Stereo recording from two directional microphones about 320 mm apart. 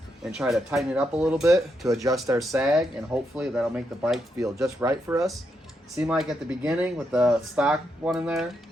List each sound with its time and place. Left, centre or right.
0.3 s speech: centre